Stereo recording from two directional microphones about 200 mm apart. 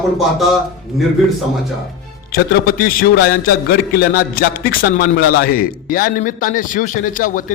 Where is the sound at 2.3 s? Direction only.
45° left (ahead or behind).